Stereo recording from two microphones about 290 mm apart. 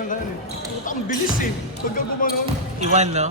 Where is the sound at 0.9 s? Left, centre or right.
Left.